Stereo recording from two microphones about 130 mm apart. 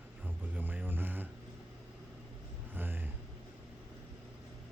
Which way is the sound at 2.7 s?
15° right (ahead or behind).